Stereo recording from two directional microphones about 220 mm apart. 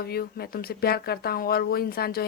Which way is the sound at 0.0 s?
45° left (ahead or behind).